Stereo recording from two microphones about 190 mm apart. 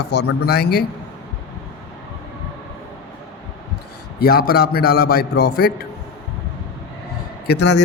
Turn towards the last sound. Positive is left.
turn(degrees=65)  # may be behind; listen again after turning